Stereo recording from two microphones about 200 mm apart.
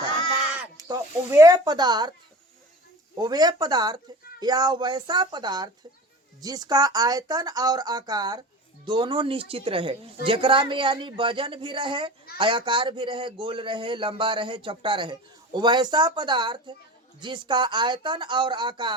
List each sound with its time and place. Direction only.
0.8 s speech: 15° right (ahead or behind)
3.2 s speech: 20° right (ahead or behind)